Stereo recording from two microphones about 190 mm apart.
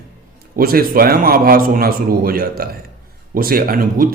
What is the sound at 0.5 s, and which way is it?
Speech, 50° right (ahead or behind).